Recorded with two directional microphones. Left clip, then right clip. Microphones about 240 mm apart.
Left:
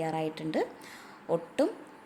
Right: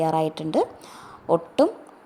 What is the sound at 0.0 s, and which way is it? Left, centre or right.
A woman's voice, right.